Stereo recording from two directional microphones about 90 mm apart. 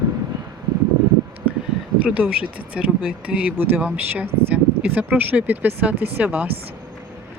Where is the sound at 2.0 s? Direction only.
15° right (ahead or behind).